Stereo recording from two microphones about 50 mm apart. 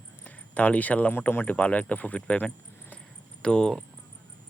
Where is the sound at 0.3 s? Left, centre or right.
Left.